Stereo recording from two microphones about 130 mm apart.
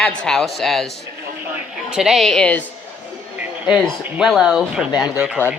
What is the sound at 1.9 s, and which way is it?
Speech, 5° right (ahead or behind).